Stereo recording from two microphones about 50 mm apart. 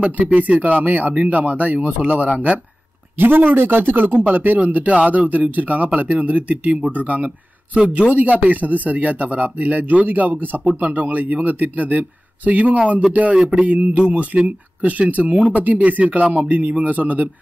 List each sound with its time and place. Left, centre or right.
0.3 s speech: right
3.2 s speech: right
13.3 s speech: centre